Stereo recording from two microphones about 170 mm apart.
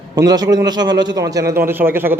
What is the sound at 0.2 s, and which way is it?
A man's voice, 25° right (ahead or behind).